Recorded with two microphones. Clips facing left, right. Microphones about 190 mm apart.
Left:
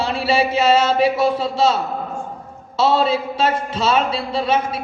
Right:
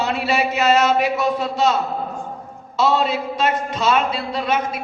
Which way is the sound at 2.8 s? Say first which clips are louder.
Left 2 dB; 30° left (ahead or behind).